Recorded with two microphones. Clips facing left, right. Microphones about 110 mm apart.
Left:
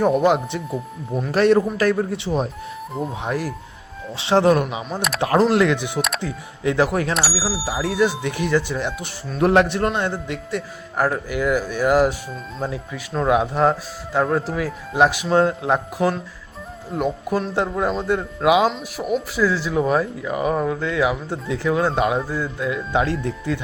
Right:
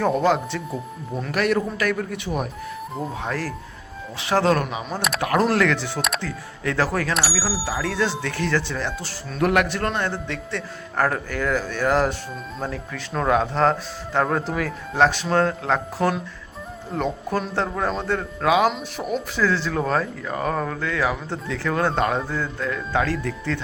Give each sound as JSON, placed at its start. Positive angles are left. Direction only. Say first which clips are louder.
{"t": 0.0, "sound": "speech", "louder": "left 3 dB", "side_deg": 20}
{"t": 1.3, "sound": "a man's voice", "louder": "left 6 dB", "side_deg": 30}
{"t": 7.1, "sound": "speech", "louder": "left 1 dB", "side_deg": 0}
{"t": 7.6, "sound": "speech", "louder": "left 6 dB", "side_deg": 15}
{"t": 13.1, "sound": "speech", "louder": "left 2 dB", "side_deg": 10}
{"t": 18.7, "sound": "speech", "louder": "left 3 dB", "side_deg": 5}
{"t": 21.8, "sound": "speech", "louder": "even", "side_deg": 5}